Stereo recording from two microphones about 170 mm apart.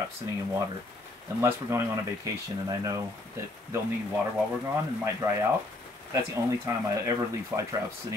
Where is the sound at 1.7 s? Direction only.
15° right (ahead or behind).